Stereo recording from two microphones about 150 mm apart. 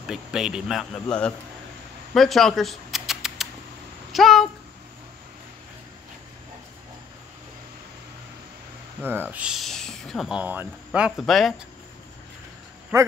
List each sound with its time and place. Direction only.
0.1 s speech: 5° right (ahead or behind)
2.1 s a sound: centre (ahead or behind)
9.0 s speech: 15° right (ahead or behind)
12.9 s a man's voice: 20° right (ahead or behind)